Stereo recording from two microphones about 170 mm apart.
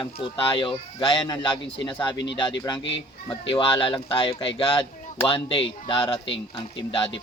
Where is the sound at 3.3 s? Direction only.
30° left (ahead or behind).